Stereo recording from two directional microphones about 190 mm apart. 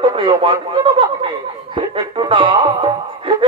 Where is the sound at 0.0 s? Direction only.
25° right (ahead or behind).